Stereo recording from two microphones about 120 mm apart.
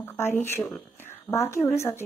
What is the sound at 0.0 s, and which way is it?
Speech, 20° left (ahead or behind).